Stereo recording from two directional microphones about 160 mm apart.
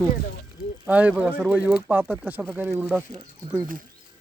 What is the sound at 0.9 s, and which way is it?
Speech, 10° right (ahead or behind).